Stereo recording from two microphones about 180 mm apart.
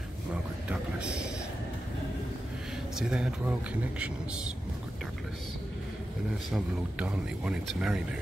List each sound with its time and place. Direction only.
0.3 s speech: 5° right (ahead or behind)
3.0 s speech: 5° right (ahead or behind)
6.5 s speech: 5° right (ahead or behind)